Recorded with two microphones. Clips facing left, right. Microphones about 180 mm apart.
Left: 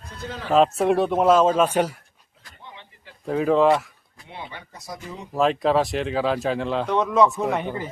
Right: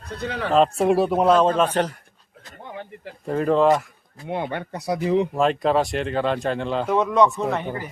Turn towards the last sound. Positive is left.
turn(degrees=20)  # may be behind; listen again after turning